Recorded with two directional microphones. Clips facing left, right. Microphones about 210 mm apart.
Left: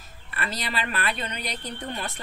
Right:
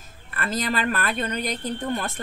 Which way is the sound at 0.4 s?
45° right (ahead or behind).